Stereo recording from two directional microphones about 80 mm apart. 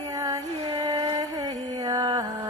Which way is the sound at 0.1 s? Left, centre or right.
Right.